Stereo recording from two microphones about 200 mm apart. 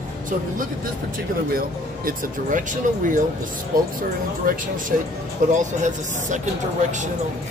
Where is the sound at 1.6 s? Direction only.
45° right (ahead or behind).